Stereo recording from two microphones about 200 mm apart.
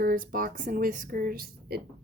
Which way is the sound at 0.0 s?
45° right (ahead or behind).